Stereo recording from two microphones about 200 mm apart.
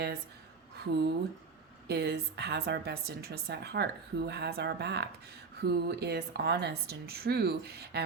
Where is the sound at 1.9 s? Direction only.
55° right (ahead or behind).